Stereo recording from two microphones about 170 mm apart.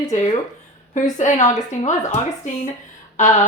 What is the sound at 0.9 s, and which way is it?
Speech, 45° left (ahead or behind).